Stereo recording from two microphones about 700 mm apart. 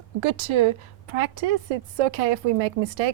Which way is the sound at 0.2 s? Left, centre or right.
Right.